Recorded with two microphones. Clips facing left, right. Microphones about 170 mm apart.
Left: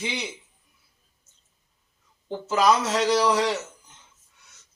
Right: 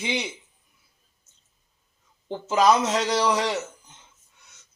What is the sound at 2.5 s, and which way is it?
Speech, 20° right (ahead or behind).